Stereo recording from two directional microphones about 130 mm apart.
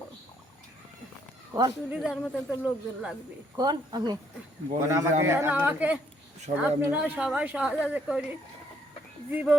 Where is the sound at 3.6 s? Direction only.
30° right (ahead or behind).